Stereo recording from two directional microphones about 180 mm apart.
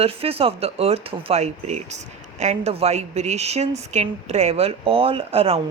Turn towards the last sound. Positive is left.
turn(degrees=-35)  # may be behind; listen again after turning